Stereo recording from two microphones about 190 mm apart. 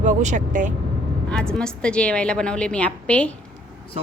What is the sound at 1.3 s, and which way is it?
A woman's voice, 5° left (ahead or behind).